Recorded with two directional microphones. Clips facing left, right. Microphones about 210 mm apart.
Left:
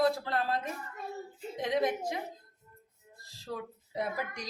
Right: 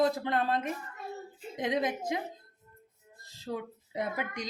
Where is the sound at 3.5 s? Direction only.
25° right (ahead or behind).